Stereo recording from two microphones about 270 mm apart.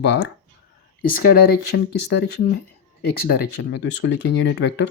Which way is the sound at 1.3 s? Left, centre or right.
Left.